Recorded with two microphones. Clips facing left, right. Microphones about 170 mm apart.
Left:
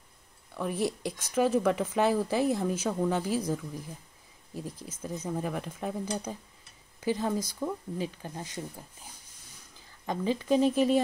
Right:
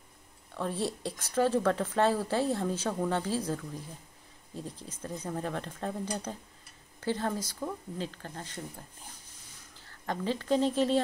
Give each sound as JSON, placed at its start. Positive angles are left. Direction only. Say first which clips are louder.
{"t": 0.6, "sound": "speech", "louder": "left 2 dB", "side_deg": 15}